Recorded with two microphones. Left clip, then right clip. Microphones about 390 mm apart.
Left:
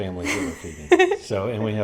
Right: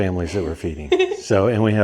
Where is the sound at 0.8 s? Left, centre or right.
Left.